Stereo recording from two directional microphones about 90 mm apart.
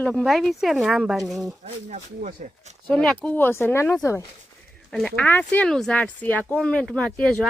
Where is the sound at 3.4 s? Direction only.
25° left (ahead or behind).